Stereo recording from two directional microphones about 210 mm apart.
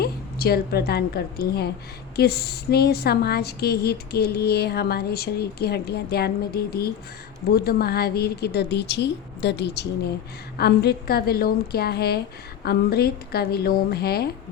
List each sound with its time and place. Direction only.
0.0 s a woman's voice: 50° left (ahead or behind)